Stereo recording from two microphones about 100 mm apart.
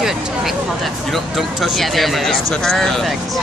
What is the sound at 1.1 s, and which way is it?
Speech, centre (ahead or behind).